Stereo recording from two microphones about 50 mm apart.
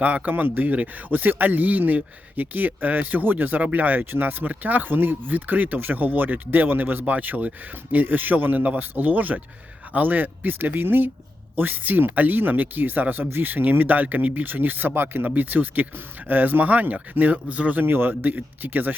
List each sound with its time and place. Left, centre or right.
0.0 s speech: right
17.8 s speech: right